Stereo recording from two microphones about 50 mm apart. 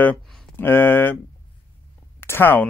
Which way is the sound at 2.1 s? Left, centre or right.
Left.